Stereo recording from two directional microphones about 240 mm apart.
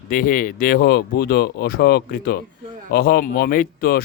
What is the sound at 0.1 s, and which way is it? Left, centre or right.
Speech, left.